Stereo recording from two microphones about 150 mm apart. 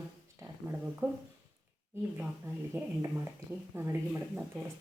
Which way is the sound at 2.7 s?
15° right (ahead or behind).